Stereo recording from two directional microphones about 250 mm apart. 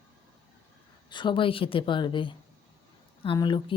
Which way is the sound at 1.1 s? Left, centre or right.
Centre.